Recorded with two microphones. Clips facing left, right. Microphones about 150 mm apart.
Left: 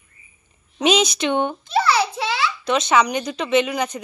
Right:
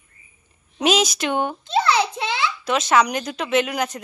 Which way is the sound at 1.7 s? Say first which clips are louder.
Right 1 dB; 20° right (ahead or behind).